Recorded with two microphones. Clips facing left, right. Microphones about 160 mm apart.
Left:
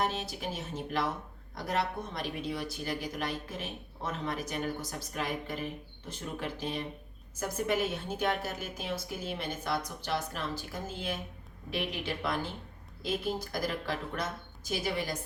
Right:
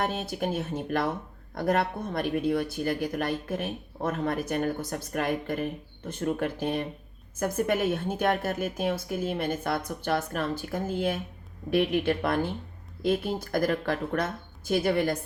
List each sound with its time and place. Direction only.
0.0 s speech: 55° right (ahead or behind)